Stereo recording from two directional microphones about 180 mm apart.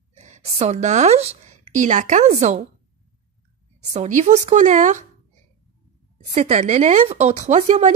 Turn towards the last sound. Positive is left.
turn(degrees=-40)  # may be behind; listen again after turning